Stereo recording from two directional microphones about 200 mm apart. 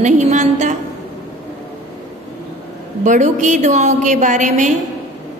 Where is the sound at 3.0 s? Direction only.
35° right (ahead or behind).